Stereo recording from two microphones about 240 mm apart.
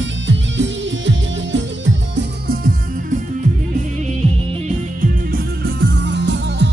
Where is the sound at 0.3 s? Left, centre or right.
Right.